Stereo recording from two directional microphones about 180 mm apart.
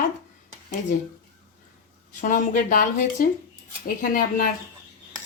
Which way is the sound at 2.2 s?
45° left (ahead or behind).